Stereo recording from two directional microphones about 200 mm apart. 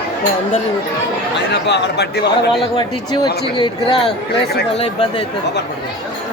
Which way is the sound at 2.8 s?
20° left (ahead or behind).